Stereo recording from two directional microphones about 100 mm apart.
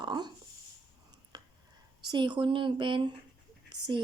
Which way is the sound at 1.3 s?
45° right (ahead or behind).